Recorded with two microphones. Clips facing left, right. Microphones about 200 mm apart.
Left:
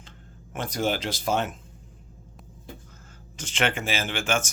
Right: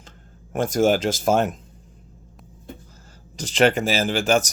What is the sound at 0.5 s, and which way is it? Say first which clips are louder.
Speech: right 8 dB; 45° right (ahead or behind).